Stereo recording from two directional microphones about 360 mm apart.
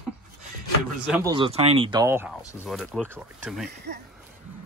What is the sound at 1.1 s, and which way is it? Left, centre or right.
Speech, centre.